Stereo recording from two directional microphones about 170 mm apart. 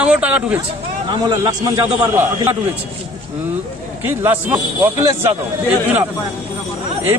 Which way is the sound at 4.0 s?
10° right (ahead or behind).